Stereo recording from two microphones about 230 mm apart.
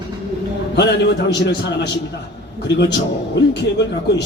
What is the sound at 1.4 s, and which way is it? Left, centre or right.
Speech, left.